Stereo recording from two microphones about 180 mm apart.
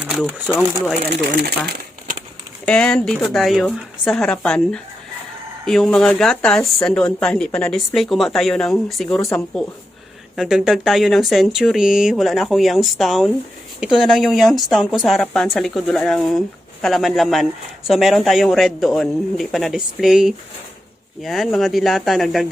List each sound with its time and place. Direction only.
0.0 s speech: 5° right (ahead or behind)
1.4 s speech: 60° right (ahead or behind)
2.6 s speech: 5° left (ahead or behind)